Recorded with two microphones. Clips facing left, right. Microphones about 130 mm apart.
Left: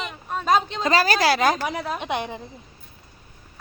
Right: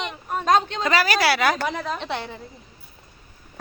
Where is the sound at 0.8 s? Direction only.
40° left (ahead or behind).